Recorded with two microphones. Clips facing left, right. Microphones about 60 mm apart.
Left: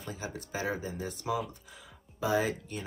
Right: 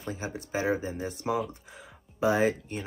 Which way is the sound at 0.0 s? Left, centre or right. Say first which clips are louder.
Right 4 dB; right.